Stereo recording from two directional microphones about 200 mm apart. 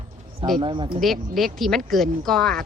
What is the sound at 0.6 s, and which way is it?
Speech, 25° right (ahead or behind).